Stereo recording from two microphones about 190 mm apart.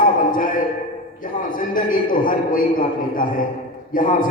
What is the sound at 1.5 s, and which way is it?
A man's voice, 45° left (ahead or behind).